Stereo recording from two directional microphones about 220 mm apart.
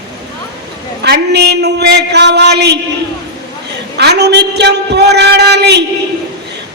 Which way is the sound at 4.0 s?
50° right (ahead or behind).